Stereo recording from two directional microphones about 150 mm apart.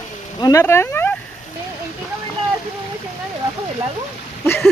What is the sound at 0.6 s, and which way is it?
Speech, 15° left (ahead or behind).